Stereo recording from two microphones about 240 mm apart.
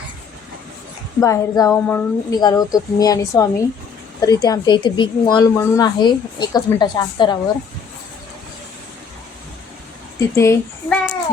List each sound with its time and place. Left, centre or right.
1.2 s speech: centre
10.2 s a child's voice: centre